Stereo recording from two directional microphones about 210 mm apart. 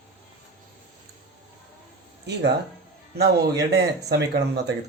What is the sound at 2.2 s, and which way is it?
Speech, 55° right (ahead or behind).